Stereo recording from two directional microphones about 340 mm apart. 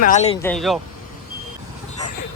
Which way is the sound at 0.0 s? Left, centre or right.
Centre.